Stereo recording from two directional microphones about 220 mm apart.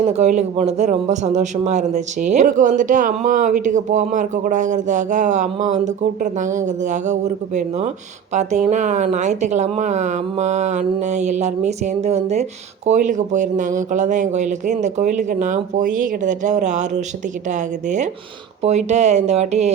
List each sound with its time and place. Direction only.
0.0 s speech: 30° right (ahead or behind)